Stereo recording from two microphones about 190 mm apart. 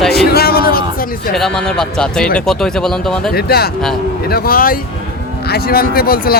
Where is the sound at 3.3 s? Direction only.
55° left (ahead or behind).